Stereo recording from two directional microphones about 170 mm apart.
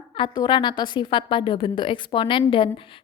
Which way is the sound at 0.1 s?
30° left (ahead or behind).